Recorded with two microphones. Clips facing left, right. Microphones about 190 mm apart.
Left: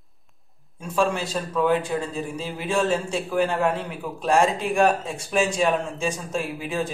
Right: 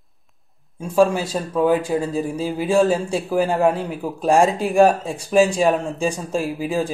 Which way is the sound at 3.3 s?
35° right (ahead or behind).